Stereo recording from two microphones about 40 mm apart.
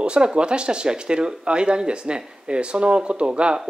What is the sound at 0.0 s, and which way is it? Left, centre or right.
Speech, right.